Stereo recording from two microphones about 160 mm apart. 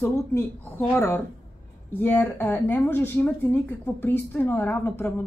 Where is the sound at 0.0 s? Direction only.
15° left (ahead or behind).